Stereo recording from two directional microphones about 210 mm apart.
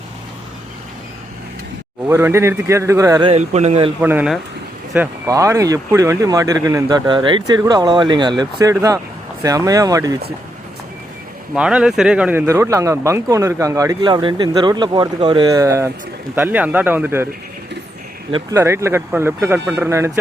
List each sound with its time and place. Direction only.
2.0 s speech: 10° right (ahead or behind); by 3.9 s 30° right (ahead or behind)
4.0 s speech: 5° right (ahead or behind)
11.5 s speech: 5° right (ahead or behind)
18.5 s speech: 15° right (ahead or behind)